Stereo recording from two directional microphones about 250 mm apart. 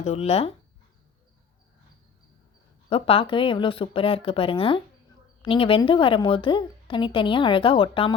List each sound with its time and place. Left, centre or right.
0.0 s a woman's voice: left
2.9 s a woman's voice: left